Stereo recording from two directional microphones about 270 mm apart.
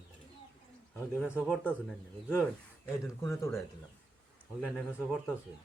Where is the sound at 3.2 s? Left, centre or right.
Centre.